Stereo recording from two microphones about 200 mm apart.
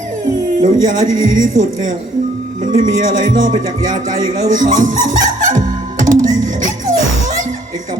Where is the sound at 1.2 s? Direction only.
40° right (ahead or behind).